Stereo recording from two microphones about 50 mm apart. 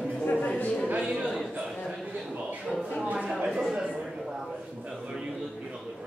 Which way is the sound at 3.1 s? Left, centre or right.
Centre.